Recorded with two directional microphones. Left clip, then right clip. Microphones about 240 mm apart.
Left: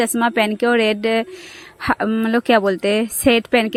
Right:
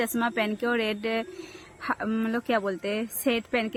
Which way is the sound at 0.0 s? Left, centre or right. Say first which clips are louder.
Left 10 dB; left.